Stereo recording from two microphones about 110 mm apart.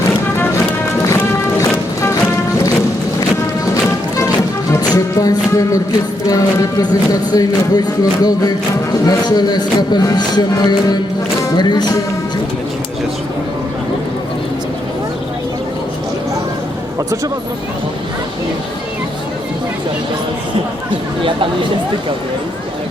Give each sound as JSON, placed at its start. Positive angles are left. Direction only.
{"t": 1.5, "sound": "music", "side_deg": 25}
{"t": 4.8, "sound": "music", "side_deg": 35}
{"t": 6.2, "sound": "speech", "side_deg": 35}